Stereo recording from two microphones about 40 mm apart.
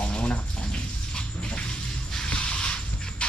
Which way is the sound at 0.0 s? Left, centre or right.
Left.